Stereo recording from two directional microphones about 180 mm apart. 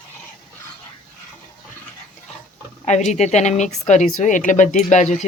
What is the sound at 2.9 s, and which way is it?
Speech, 40° left (ahead or behind).